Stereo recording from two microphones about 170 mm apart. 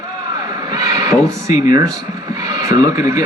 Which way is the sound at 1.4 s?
20° right (ahead or behind).